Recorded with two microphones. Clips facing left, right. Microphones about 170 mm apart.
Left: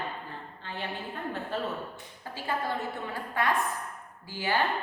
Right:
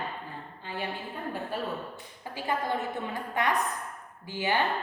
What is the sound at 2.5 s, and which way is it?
A woman's voice, 20° right (ahead or behind).